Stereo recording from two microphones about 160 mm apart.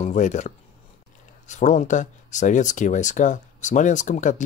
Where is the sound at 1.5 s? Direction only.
50° left (ahead or behind).